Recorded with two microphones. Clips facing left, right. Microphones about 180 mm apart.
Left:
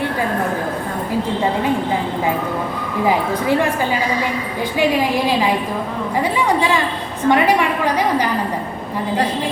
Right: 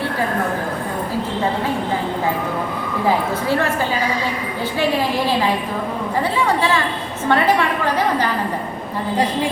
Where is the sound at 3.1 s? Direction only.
15° left (ahead or behind).